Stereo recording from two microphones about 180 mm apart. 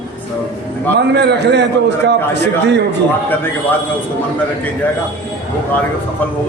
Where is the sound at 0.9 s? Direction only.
70° right (ahead or behind).